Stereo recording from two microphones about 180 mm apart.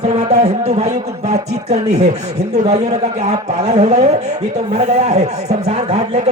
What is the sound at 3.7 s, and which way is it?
Speech, 40° right (ahead or behind).